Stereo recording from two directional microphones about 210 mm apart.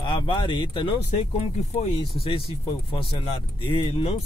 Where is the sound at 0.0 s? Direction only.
20° left (ahead or behind).